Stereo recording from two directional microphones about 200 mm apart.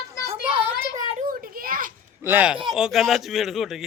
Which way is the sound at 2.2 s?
10° right (ahead or behind).